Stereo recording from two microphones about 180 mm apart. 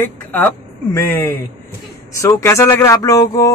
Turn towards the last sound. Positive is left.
turn(degrees=15)  # may be behind; listen again after turning